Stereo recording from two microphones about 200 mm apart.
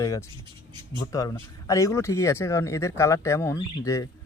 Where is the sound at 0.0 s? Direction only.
15° left (ahead or behind).